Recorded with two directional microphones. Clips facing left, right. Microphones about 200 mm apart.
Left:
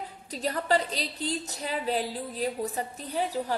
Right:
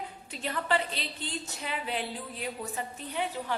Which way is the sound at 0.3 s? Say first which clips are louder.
Left 4 dB; 40° left (ahead or behind).